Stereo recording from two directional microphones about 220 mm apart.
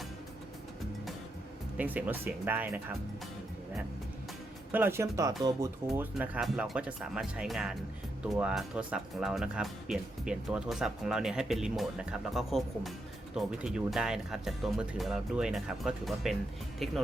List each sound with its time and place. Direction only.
1.7 s speech: 5° right (ahead or behind)
4.7 s speech: 10° right (ahead or behind)
5.9 s speech: 5° right (ahead or behind)